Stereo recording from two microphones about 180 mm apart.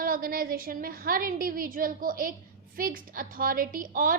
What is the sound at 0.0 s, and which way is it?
A woman's voice, 50° right (ahead or behind).